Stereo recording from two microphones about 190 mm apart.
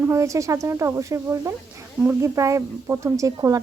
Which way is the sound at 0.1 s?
15° right (ahead or behind).